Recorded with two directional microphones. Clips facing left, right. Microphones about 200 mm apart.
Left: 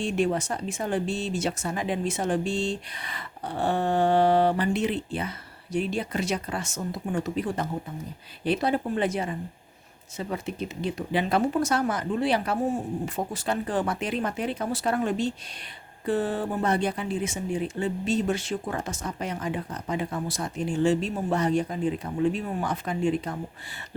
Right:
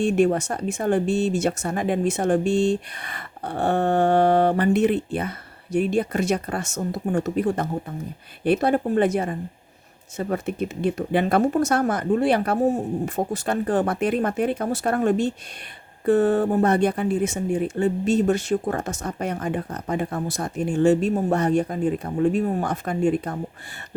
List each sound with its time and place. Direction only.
0.0 s speech: 50° right (ahead or behind)
13.1 s speech: 45° right (ahead or behind)